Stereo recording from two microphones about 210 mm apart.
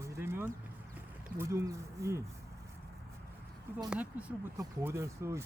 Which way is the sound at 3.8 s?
5° right (ahead or behind).